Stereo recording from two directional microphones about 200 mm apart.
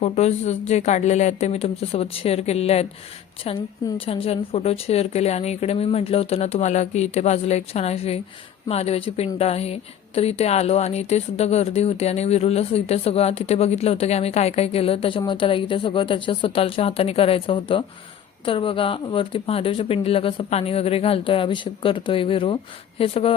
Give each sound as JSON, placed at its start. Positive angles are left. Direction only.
{"t": 0.0, "sound": "speech", "side_deg": 35}